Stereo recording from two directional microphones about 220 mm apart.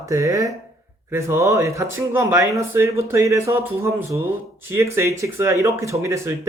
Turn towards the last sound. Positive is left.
turn(degrees=-15)  # may be behind; listen again after turning